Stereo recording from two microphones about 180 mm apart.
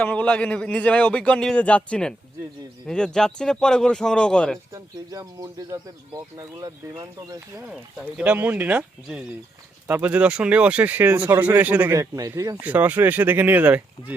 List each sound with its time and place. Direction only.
0.0 s a man's voice: 10° left (ahead or behind)
4.7 s speech: 20° right (ahead or behind)
7.7 s speech: 5° right (ahead or behind)